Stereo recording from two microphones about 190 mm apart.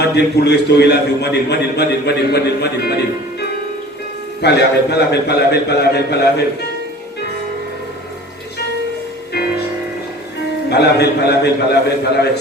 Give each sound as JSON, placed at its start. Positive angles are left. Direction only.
{"t": 0.0, "sound": "a man's voice", "side_deg": 60}
{"t": 4.4, "sound": "a man's voice", "side_deg": 60}
{"t": 10.7, "sound": "a man's voice", "side_deg": 60}